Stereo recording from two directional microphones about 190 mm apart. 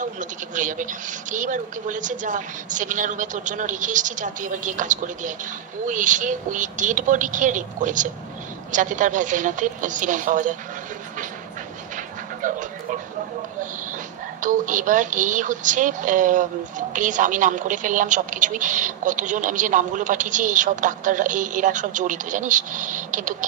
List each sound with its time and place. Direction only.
0.0 s a woman's voice: 40° right (ahead or behind)
12.4 s speech: 45° right (ahead or behind)
14.4 s a woman's voice: 45° right (ahead or behind)